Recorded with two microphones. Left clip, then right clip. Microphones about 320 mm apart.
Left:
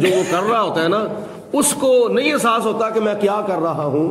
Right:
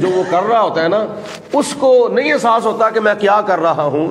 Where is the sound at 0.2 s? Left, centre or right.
Right.